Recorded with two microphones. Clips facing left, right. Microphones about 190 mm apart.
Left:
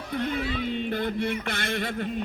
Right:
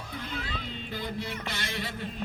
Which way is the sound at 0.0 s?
60° left (ahead or behind).